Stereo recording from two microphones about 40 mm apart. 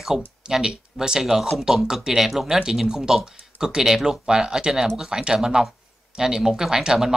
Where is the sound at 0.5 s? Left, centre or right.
Centre.